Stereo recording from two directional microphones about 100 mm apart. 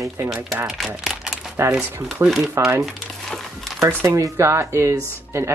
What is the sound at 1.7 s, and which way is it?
Speech, 15° right (ahead or behind).